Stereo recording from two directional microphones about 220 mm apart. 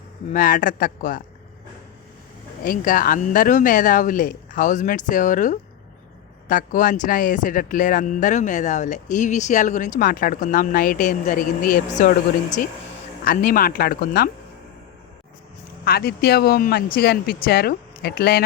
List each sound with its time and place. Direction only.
0.3 s speech: 40° left (ahead or behind)
2.6 s speech: 40° left (ahead or behind)
15.8 s speech: 45° left (ahead or behind)